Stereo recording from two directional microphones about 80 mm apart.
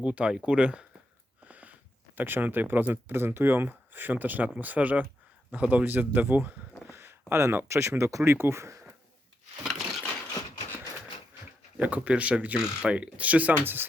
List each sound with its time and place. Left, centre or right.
0.0 s speech: centre; by 8.8 s right
9.6 s a sound: centre
11.8 s speech: centre